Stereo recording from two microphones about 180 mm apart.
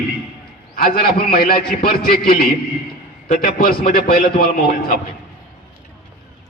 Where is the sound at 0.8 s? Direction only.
55° left (ahead or behind).